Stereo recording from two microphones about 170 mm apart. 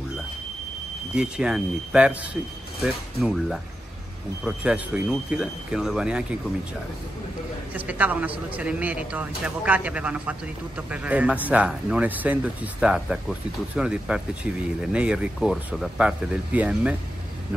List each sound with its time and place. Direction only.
1.1 s speech: 5° right (ahead or behind)
7.7 s a man's voice: 10° right (ahead or behind)